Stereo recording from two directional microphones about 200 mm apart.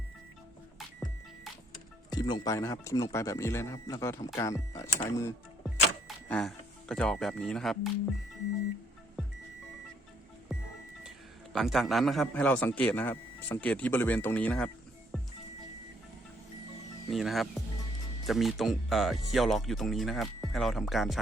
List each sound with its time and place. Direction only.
2.0 s a man's voice: 20° left (ahead or behind)
5.8 s speech: 5° left (ahead or behind)
10.5 s music: centre (ahead or behind)
11.5 s a man's voice: centre (ahead or behind)
17.1 s speech: centre (ahead or behind)